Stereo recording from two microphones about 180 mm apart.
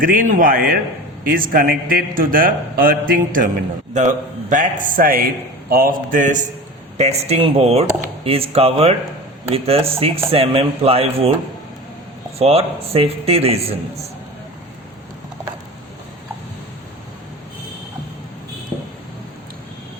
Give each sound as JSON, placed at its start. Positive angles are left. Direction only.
{"t": 0.0, "sound": "a man's voice", "side_deg": -50}
{"t": 12.4, "sound": "a man's voice", "side_deg": -35}